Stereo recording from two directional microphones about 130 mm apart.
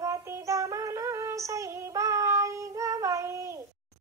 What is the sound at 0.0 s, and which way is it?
Female singing, 25° right (ahead or behind).